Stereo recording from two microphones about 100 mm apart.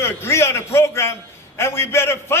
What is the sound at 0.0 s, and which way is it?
A man's voice, 25° left (ahead or behind).